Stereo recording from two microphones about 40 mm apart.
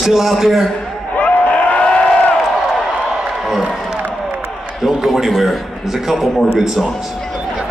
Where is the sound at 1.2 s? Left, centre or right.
Left.